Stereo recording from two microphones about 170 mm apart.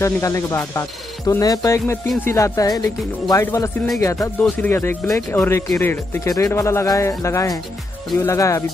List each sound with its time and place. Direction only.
0.0 s speech: 20° left (ahead or behind)